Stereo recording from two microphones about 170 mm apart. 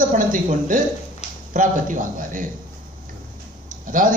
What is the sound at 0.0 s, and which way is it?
A man's voice, 50° right (ahead or behind).